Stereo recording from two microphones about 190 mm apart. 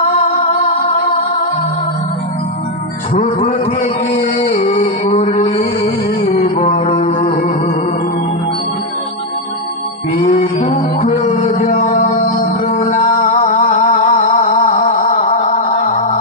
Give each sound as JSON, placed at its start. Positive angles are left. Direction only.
{"t": 0.0, "sound": "music", "side_deg": 35}
{"t": 3.2, "sound": "a sound", "side_deg": 35}
{"t": 5.1, "sound": "music", "side_deg": 35}
{"t": 10.1, "sound": "mantra", "side_deg": 30}
{"t": 11.5, "sound": "music", "side_deg": 40}